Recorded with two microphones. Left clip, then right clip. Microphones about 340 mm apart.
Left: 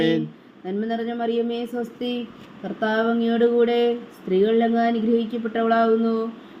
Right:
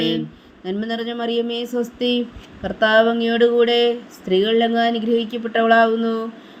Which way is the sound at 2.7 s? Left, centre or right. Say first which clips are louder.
Right 7 dB; right.